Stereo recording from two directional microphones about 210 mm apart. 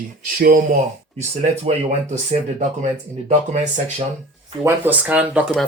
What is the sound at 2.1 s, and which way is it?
Speech, 35° right (ahead or behind).